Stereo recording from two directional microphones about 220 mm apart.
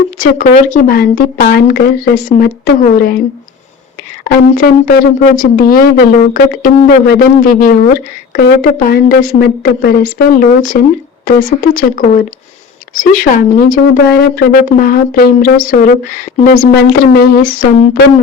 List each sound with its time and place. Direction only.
0.2 s speech: 40° left (ahead or behind)
4.2 s speech: 40° left (ahead or behind)
17.1 s speech: 45° left (ahead or behind)